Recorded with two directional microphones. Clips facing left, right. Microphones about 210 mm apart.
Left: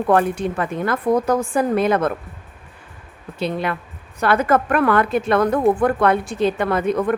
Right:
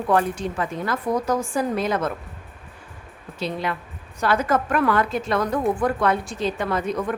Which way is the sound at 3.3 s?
60° left (ahead or behind).